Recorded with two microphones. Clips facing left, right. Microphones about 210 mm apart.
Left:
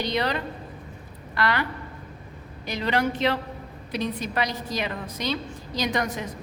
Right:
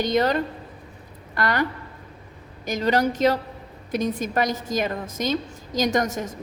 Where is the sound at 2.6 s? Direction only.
45° right (ahead or behind).